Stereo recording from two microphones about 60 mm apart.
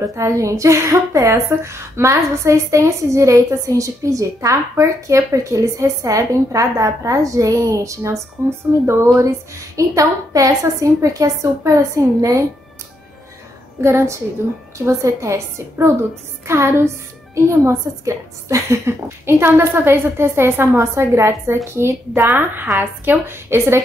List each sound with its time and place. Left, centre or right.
0.1 s a woman's voice: right
8.8 s a woman's voice: right
9.8 s a woman's voice: right
13.7 s a woman's voice: right
17.5 s a woman's voice: right